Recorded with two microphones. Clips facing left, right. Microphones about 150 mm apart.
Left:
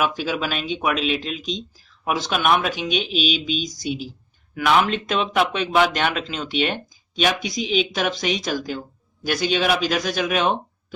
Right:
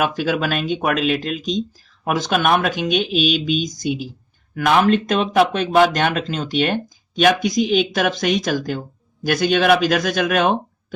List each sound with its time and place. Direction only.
0.0 s speech: 55° right (ahead or behind)